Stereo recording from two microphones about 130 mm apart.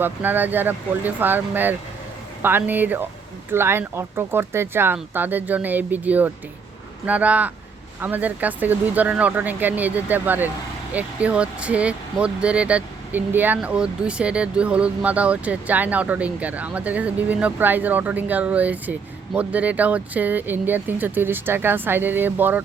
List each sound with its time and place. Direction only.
0.0 s speech: 15° right (ahead or behind)